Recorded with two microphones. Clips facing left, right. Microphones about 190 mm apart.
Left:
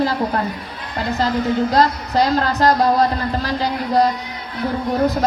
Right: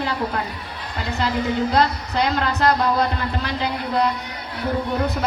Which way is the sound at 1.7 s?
35° left (ahead or behind).